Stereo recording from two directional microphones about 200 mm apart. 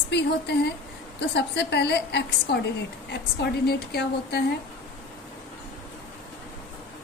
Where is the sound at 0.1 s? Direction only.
55° left (ahead or behind).